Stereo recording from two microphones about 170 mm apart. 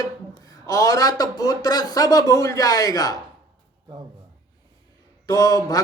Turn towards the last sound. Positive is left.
turn(degrees=20)  # may be behind; listen again after turning